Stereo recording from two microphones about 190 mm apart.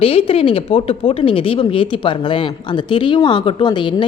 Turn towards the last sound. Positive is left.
turn(degrees=25)  # may be behind; listen again after turning